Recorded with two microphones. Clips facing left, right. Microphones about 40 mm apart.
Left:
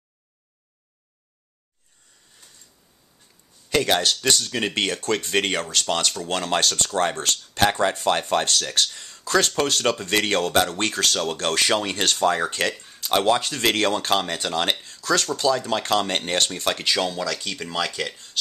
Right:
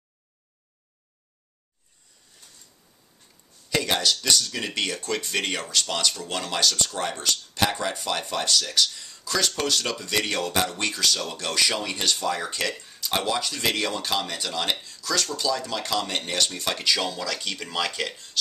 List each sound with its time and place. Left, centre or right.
3.9 s speech: left
16.7 s speech: left
17.3 s speech: centre